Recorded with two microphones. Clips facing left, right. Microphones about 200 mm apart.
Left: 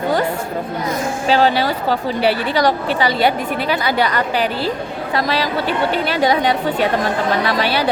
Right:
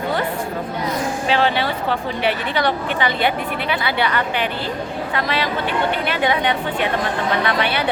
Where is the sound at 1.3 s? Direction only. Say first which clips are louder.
Left 5 dB; 40° left (ahead or behind).